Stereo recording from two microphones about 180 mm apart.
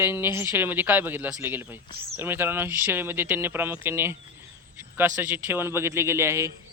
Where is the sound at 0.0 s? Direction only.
15° right (ahead or behind).